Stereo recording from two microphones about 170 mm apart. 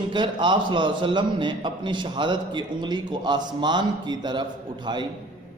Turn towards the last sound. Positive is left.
turn(degrees=-25)  # may be behind; listen again after turning